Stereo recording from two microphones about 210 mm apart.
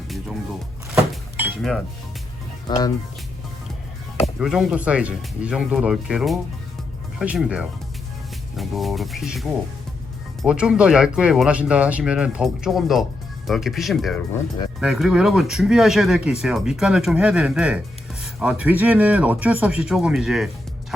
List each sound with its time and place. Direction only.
2.6 s speech: 20° left (ahead or behind)
4.4 s speech: 5° right (ahead or behind)